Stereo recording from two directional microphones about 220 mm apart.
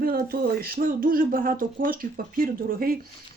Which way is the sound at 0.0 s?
40° right (ahead or behind).